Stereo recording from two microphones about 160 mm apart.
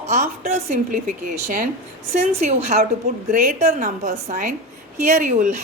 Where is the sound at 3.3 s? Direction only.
55° right (ahead or behind).